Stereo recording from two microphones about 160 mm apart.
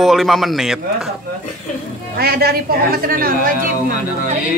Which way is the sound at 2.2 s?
75° right (ahead or behind).